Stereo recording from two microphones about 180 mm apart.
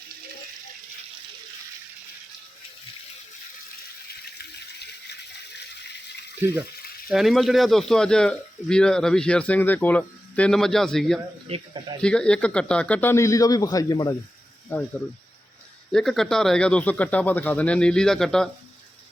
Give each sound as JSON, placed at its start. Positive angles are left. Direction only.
{"t": 4.4, "sound": "water", "side_deg": 65}
{"t": 6.4, "sound": "speech", "side_deg": -15}
{"t": 7.1, "sound": "speech", "side_deg": 0}
{"t": 11.4, "sound": "speech", "side_deg": -35}
{"t": 12.0, "sound": "speech", "side_deg": 5}
{"t": 15.9, "sound": "speech", "side_deg": 0}